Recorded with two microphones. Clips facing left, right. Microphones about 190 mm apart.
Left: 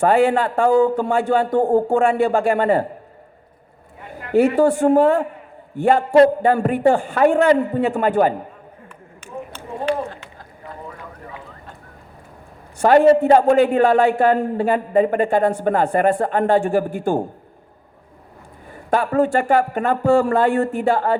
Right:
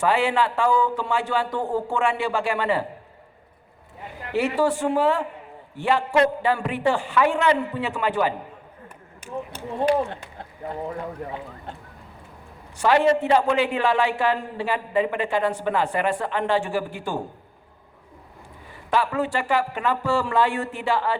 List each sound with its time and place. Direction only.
0.0 s a man's voice: 50° left (ahead or behind)
4.1 s a man's voice: 50° left (ahead or behind)
12.8 s a man's voice: 50° left (ahead or behind)
18.7 s a man's voice: 50° left (ahead or behind)